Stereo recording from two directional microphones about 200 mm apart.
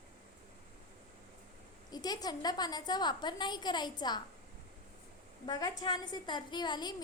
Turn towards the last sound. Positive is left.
turn(degrees=20)  # may be behind; listen again after turning